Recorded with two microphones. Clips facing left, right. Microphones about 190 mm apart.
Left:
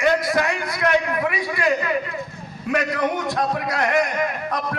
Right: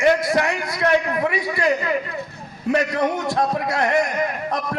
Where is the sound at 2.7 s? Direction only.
30° right (ahead or behind).